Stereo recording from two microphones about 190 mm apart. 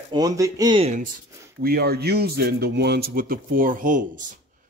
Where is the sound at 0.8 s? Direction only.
40° right (ahead or behind).